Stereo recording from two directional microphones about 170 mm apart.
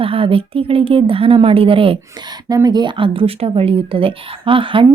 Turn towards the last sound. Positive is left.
turn(degrees=-30)  # may be behind; listen again after turning